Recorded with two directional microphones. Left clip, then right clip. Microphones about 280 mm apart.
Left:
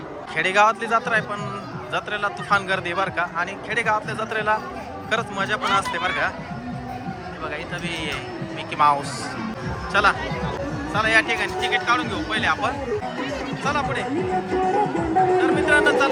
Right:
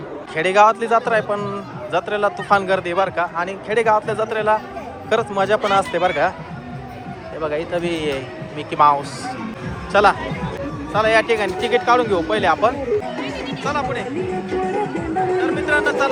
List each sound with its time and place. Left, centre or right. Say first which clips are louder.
0.3 s a man's voice: right 4 dB; centre
8.8 s a man's voice: right 4 dB; centre
14.5 s music: left 1 dB; left
15.4 s music: left 1 dB; centre